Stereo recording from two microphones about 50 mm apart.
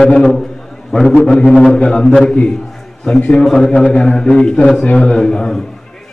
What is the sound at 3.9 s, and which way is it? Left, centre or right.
Speech, left.